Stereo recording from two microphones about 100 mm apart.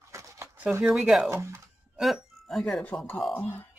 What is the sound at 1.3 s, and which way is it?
Speech, 25° right (ahead or behind).